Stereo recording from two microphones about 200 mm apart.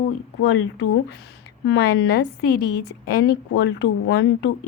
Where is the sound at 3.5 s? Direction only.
65° left (ahead or behind).